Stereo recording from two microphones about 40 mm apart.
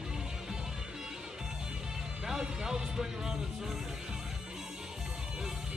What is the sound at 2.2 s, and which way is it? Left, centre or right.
Music, centre.